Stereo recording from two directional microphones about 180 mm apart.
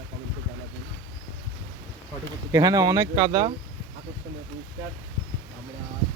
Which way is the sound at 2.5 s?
20° right (ahead or behind).